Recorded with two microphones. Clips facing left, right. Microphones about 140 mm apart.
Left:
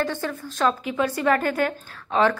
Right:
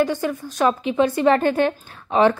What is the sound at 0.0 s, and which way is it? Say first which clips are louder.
A woman's voice: right 6 dB; 15° right (ahead or behind).